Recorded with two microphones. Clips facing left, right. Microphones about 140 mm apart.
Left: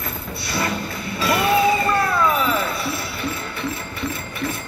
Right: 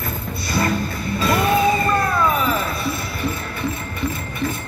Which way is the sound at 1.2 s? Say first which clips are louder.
Even; centre (ahead or behind).